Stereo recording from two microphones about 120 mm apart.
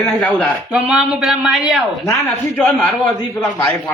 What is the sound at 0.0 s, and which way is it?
Speech, 10° left (ahead or behind).